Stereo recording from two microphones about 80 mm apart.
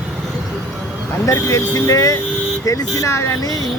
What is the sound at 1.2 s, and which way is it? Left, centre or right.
Speech, left.